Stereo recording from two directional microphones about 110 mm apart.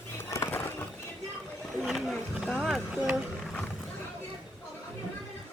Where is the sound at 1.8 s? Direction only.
Centre (ahead or behind).